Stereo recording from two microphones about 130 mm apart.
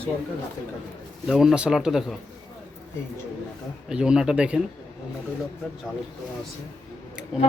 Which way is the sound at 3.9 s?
5° right (ahead or behind).